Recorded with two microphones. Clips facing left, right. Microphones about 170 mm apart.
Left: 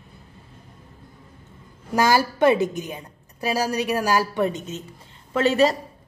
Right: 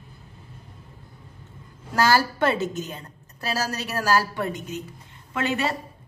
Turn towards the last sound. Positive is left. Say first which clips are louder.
# left 7 dB
turn(degrees=35)  # may be behind; listen again after turning